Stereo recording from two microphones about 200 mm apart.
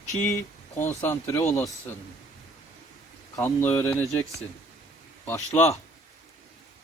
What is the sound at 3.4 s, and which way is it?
Speech, 10° left (ahead or behind).